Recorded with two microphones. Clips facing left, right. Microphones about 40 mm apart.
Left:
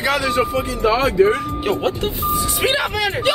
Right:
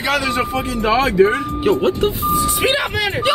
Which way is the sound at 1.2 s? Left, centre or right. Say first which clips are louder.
Right 1 dB; centre.